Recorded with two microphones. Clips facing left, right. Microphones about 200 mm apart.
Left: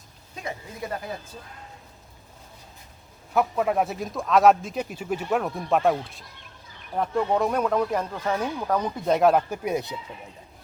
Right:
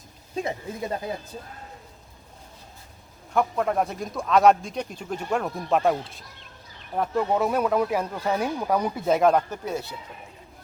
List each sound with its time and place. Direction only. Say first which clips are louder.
0.4 s speech: left 1 dB; 25° right (ahead or behind)
3.3 s speech: left 1 dB; 5° left (ahead or behind)